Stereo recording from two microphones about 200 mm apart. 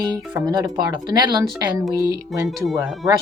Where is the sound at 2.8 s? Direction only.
Centre (ahead or behind).